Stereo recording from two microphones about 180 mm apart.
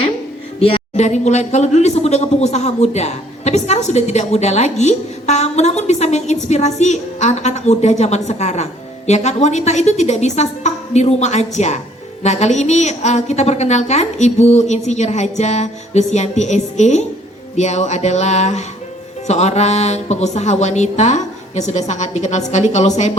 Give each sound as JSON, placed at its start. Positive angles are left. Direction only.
{"t": 0.6, "sound": "speech", "side_deg": 35}